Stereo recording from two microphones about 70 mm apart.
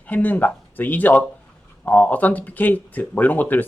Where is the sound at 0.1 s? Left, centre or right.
Left.